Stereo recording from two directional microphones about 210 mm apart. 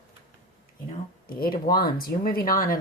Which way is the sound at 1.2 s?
45° left (ahead or behind).